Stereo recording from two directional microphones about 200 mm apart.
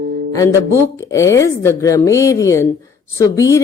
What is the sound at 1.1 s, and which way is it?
A woman's voice, 15° left (ahead or behind).